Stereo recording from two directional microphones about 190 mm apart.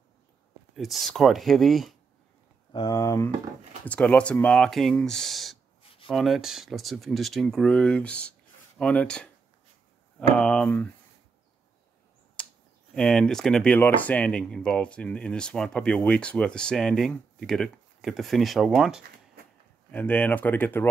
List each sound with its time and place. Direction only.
0.7 s speech: centre (ahead or behind)
2.7 s speech: 20° left (ahead or behind); by 9.3 s 5° left (ahead or behind)
10.3 s speech: 5° left (ahead or behind)
12.4 s a sound: 5° left (ahead or behind)
12.9 s speech: 5° left (ahead or behind)
19.9 s speech: 10° left (ahead or behind)